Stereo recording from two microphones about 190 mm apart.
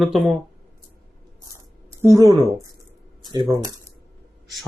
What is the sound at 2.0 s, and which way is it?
A woman's voice, 15° right (ahead or behind).